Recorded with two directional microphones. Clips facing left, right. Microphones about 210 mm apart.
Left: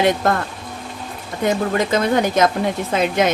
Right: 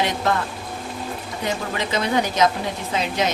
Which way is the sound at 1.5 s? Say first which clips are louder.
Left 8 dB; 50° left (ahead or behind).